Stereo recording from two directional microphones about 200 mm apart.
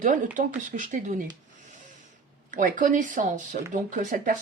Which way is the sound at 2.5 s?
40° right (ahead or behind).